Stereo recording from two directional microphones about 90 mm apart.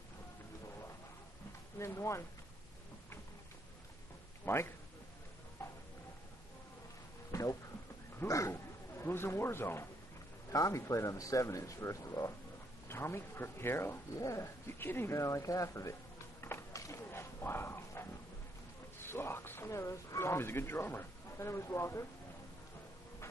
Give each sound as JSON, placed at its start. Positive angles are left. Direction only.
{"t": 1.8, "sound": "a man's voice", "side_deg": 30}
{"t": 4.5, "sound": "speech", "side_deg": 25}
{"t": 5.6, "sound": "tick-tock", "side_deg": 30}
{"t": 7.3, "sound": "a sound", "side_deg": 40}
{"t": 8.3, "sound": "speech", "side_deg": 35}
{"t": 10.5, "sound": "a man's voice", "side_deg": 35}
{"t": 15.1, "sound": "music", "side_deg": 35}
{"t": 18.9, "sound": "speech", "side_deg": 25}